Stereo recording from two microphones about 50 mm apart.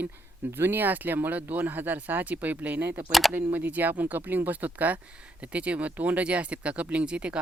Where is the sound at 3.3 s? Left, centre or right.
Right.